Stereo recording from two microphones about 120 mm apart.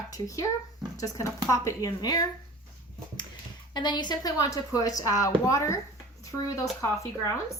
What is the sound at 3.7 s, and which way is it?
A woman's voice, 40° left (ahead or behind).